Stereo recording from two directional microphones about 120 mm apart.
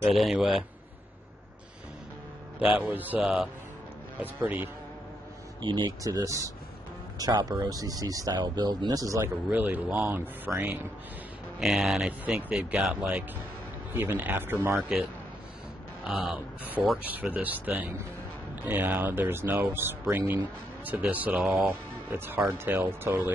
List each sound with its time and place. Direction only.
0.0 s a man's voice: centre (ahead or behind)
2.8 s speech: 15° right (ahead or behind)
5.6 s speech: 40° right (ahead or behind)
6.0 s speech: 30° right (ahead or behind)
9.5 s speech: 15° right (ahead or behind)
16.0 s speech: 5° right (ahead or behind)